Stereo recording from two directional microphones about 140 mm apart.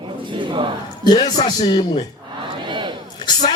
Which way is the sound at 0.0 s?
35° right (ahead or behind).